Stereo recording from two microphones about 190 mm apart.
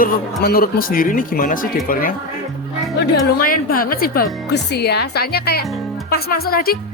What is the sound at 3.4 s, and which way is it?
Speech, 50° left (ahead or behind).